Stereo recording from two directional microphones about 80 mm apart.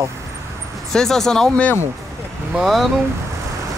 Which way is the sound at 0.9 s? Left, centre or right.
Centre.